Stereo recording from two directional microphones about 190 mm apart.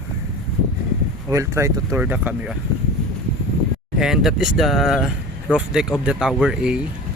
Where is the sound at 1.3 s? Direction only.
15° right (ahead or behind).